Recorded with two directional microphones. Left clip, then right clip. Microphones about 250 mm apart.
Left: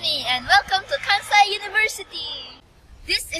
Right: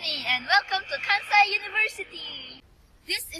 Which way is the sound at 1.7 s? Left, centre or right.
Centre.